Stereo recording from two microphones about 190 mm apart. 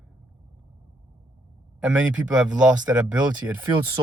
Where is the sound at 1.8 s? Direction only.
5° right (ahead or behind).